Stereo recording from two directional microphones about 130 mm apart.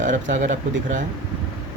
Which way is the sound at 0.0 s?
75° right (ahead or behind).